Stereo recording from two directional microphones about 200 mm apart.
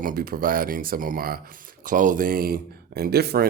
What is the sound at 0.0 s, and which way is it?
Speech, 45° right (ahead or behind).